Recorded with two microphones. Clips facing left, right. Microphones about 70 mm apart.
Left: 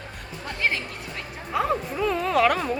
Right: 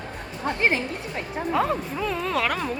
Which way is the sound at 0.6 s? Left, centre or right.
Right.